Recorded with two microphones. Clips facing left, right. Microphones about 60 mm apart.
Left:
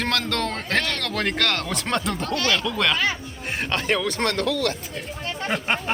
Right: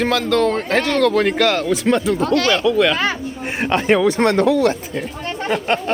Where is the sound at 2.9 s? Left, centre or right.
Right.